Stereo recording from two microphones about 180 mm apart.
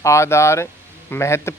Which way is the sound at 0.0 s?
15° left (ahead or behind).